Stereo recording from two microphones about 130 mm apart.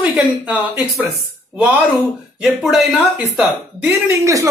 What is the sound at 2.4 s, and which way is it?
Speech, centre (ahead or behind).